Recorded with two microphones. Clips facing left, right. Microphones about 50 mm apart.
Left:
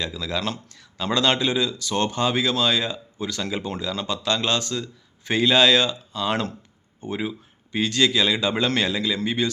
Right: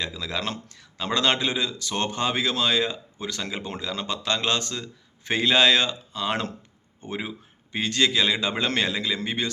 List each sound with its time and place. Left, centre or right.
0.0 s speech: right